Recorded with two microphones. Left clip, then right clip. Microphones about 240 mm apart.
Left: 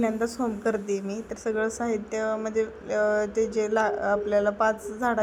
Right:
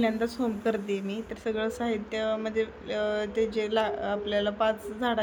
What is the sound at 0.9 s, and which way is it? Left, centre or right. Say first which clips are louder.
Speech: left 3 dB; left.